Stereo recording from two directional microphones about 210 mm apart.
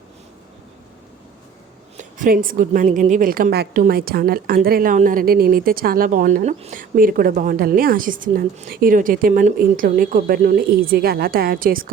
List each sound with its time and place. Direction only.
2.0 s a woman's voice: 40° right (ahead or behind)